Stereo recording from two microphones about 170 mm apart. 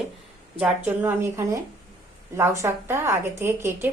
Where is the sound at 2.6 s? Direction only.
15° right (ahead or behind).